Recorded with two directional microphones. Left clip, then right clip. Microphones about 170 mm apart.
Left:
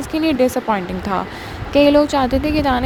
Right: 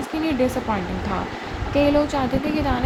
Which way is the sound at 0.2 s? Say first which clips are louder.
Left 6 dB; 50° left (ahead or behind).